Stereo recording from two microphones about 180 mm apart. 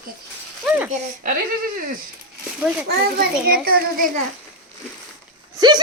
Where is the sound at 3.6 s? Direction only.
55° right (ahead or behind).